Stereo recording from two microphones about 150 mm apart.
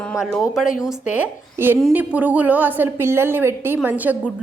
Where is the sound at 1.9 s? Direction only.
10° right (ahead or behind).